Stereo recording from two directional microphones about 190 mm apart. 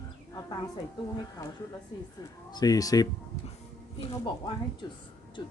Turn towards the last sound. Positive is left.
turn(degrees=25)  # may be behind; listen again after turning